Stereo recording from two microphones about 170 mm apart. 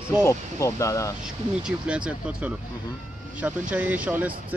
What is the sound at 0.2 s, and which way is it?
Speech, 15° left (ahead or behind).